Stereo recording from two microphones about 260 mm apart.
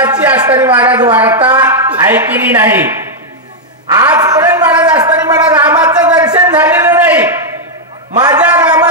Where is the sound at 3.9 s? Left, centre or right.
Centre.